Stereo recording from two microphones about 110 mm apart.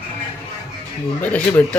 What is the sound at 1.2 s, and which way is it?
Speech, 15° left (ahead or behind).